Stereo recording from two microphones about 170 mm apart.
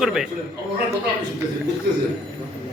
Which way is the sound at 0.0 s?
5° right (ahead or behind).